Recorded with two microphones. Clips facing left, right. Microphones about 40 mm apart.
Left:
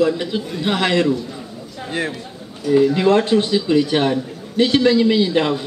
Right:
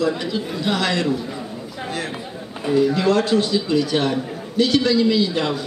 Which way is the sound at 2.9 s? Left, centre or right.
Left.